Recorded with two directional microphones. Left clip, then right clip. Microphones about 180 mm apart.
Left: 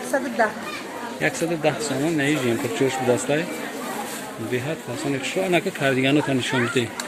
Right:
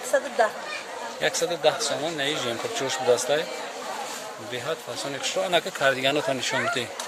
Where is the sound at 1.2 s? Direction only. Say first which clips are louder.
Left 1 dB; 20° right (ahead or behind).